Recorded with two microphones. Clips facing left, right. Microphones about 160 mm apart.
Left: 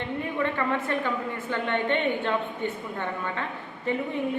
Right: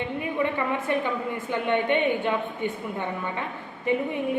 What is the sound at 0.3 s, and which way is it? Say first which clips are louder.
A woman's voice: right 1 dB; 15° right (ahead or behind).